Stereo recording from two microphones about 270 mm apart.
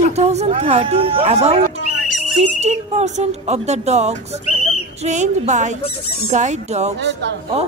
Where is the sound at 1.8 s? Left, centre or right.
Left.